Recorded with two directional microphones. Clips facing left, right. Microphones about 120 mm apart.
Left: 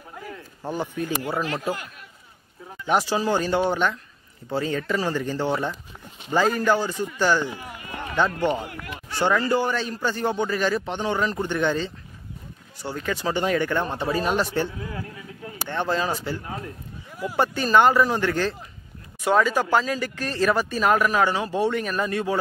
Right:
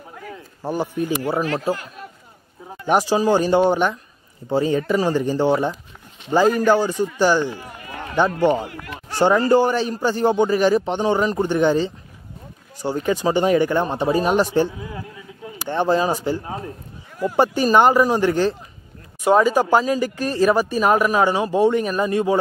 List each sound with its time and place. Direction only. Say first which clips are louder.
0.3 s speech: right 5 dB; 10° right (ahead or behind)
1.6 s speech: right 5 dB; 40° right (ahead or behind)
2.9 s speech: right 5 dB; 15° right (ahead or behind)
7.4 s speech: right 4 dB; 10° left (ahead or behind)
8.4 s speech: right 6 dB; 15° right (ahead or behind)
9.1 s speech: right 6 dB; 40° right (ahead or behind)
9.7 s speech: right 5 dB; 15° right (ahead or behind)